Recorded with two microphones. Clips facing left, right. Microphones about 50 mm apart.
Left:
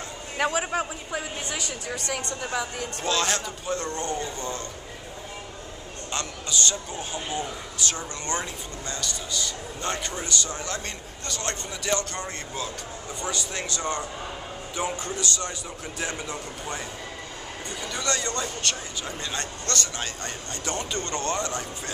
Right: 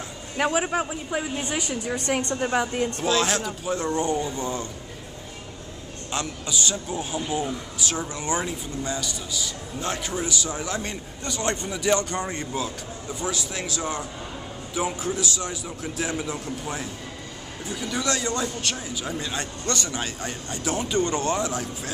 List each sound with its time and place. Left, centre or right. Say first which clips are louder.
0.4 s a man's voice: right 2 dB; centre
1.4 s a woman's voice: right 4 dB; right
3.0 s a man's voice: right 1 dB; centre
6.1 s a man's voice: right 1 dB; centre